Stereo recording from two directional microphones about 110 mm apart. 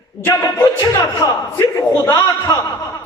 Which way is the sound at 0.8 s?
30° left (ahead or behind).